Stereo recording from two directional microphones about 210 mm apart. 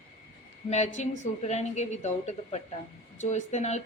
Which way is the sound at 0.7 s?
35° left (ahead or behind).